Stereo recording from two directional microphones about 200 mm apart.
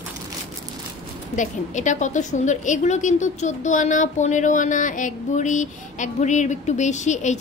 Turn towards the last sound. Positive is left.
turn(degrees=35)  # may be behind; listen again after turning